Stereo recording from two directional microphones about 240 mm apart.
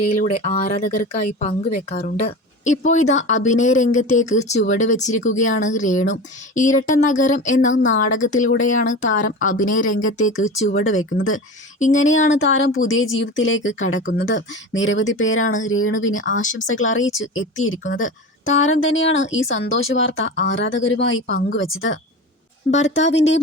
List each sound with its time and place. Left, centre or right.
0.1 s speech: left
3.4 s speech: left
10.8 s a woman's voice: left
16.3 s speech: left
16.6 s a woman's voice: left